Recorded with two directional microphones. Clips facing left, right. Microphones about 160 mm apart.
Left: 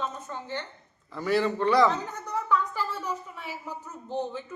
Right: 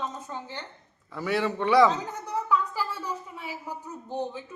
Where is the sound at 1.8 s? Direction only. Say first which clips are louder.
Right 2 dB; 10° right (ahead or behind).